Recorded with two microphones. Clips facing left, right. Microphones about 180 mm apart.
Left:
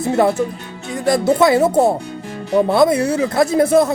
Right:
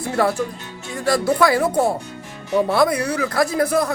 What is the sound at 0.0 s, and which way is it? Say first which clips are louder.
Speech: left 5 dB; 20° left (ahead or behind).